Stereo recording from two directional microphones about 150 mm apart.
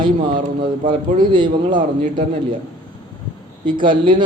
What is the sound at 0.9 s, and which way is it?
Speech, 60° right (ahead or behind).